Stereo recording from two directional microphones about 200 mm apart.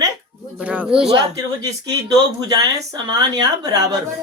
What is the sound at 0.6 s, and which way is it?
Speech, 5° right (ahead or behind).